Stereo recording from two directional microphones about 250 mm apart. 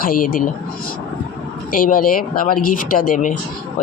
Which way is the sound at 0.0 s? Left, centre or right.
Left.